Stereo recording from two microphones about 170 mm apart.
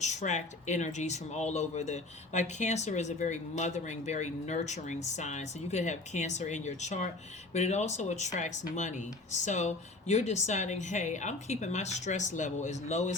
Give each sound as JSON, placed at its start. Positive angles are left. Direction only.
{"t": 0.0, "sound": "speech", "side_deg": 45}